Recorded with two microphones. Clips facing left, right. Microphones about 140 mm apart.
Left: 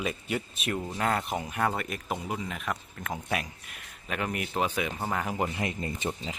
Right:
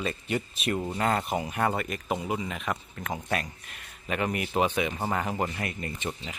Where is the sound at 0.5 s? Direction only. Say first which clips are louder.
Right 3 dB; centre (ahead or behind).